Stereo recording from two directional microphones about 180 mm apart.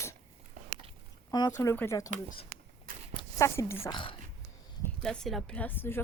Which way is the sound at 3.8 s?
25° left (ahead or behind).